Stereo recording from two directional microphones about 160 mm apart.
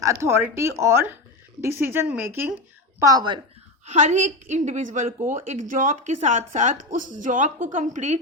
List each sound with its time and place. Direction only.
0.0 s a woman's voice: 20° right (ahead or behind)
3.8 s speech: 50° right (ahead or behind)